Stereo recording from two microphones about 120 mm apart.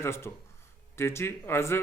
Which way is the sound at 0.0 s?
20° left (ahead or behind).